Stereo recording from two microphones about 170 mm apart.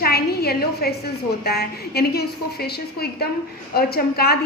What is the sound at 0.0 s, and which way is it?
A woman's voice, 65° left (ahead or behind).